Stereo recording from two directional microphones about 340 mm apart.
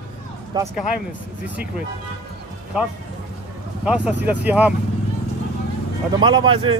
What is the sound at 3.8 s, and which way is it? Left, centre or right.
Speech, centre.